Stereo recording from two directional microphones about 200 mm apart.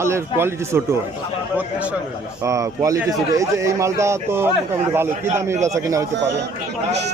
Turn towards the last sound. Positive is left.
turn(degrees=-15)  # may be behind; listen again after turning